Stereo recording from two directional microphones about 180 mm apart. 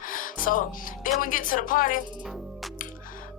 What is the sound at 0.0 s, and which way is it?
Music, 50° left (ahead or behind).